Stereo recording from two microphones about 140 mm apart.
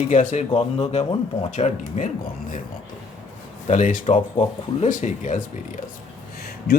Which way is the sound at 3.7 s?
60° left (ahead or behind).